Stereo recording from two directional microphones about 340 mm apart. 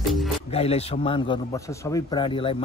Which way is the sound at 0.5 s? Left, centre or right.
Centre.